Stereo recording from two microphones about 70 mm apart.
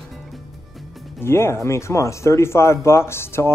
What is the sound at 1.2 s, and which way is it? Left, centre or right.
Speech, left.